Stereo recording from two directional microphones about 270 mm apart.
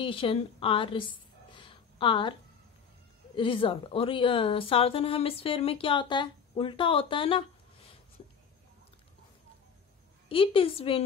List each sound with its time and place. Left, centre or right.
0.0 s a woman's voice: centre
1.5 s a sound: centre
3.3 s a woman's voice: centre
10.2 s a woman's voice: centre